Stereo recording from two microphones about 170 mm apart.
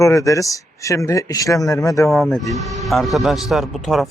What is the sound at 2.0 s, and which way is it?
Speech, centre (ahead or behind).